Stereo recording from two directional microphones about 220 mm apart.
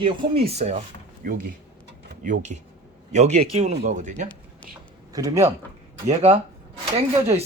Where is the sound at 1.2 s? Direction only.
40° right (ahead or behind).